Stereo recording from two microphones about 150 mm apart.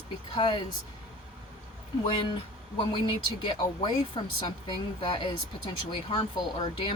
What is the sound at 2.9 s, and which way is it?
Speech, 35° left (ahead or behind).